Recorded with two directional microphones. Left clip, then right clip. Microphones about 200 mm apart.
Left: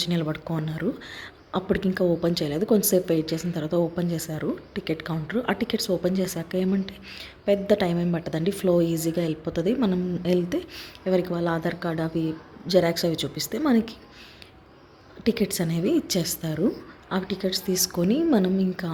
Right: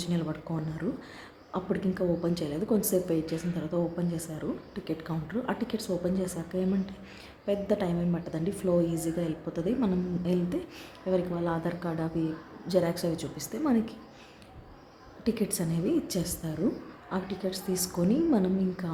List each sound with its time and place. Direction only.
0.0 s speech: 25° left (ahead or behind)
15.2 s speech: 20° left (ahead or behind)